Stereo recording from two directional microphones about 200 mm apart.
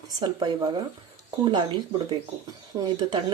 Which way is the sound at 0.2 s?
20° right (ahead or behind).